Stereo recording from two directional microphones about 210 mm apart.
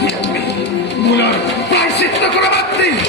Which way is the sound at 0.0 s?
55° left (ahead or behind).